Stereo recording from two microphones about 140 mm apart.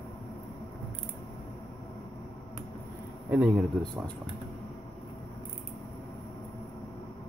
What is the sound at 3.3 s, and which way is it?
Speech, 5° right (ahead or behind).